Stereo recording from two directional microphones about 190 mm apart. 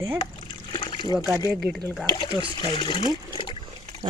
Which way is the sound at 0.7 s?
25° left (ahead or behind).